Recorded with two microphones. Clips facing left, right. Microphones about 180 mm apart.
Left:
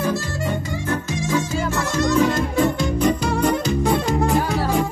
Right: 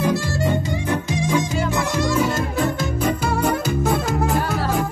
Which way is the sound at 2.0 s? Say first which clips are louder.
Left 4 dB; 5° right (ahead or behind).